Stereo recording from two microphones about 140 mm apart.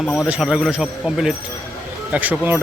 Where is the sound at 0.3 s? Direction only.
5° right (ahead or behind).